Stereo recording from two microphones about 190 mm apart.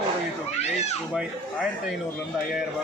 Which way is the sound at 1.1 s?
5° right (ahead or behind).